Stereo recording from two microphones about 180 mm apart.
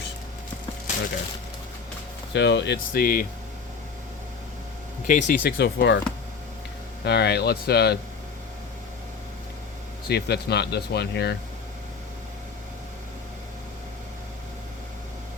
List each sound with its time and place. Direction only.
2.3 s speech: 75° left (ahead or behind)
2.9 s speech: 50° left (ahead or behind)
5.0 s speech: 45° left (ahead or behind); by 6.0 s 70° left (ahead or behind)
7.0 s speech: 70° left (ahead or behind)
10.1 s speech: 65° left (ahead or behind)